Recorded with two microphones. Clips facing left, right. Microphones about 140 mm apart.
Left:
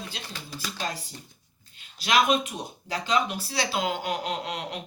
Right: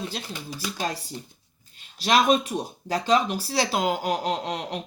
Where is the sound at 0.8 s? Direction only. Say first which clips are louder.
Right 3 dB; 40° right (ahead or behind).